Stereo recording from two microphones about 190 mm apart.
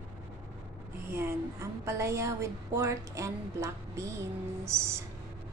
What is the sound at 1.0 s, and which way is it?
A woman's voice, 15° right (ahead or behind).